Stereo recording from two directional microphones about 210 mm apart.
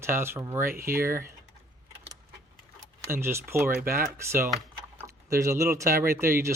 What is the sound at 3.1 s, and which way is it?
Speech, 10° right (ahead or behind).